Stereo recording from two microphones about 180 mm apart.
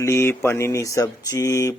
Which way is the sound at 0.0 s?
15° left (ahead or behind).